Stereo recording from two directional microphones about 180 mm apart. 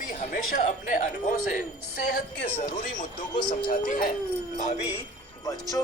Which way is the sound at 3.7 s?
50° left (ahead or behind).